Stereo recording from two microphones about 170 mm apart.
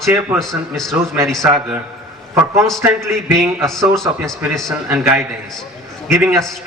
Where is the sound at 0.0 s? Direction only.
15° right (ahead or behind).